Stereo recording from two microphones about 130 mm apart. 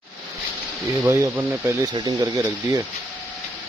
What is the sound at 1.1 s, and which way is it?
Speech, 15° right (ahead or behind).